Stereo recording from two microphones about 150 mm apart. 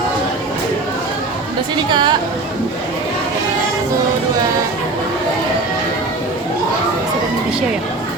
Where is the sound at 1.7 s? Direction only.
30° right (ahead or behind).